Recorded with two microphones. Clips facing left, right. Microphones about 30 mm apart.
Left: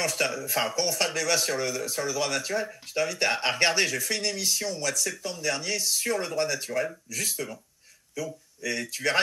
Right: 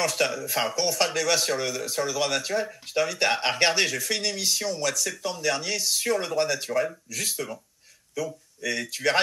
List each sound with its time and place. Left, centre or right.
0.0 s speech: centre
3.8 s speech: centre
5.2 s speech: right